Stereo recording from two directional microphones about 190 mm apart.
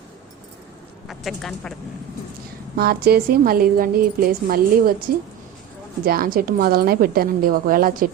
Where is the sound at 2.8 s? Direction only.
55° right (ahead or behind).